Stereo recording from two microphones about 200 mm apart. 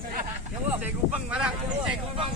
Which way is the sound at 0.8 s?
5° right (ahead or behind).